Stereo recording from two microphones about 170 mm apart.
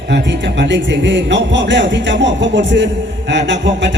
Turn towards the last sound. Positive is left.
turn(degrees=-90)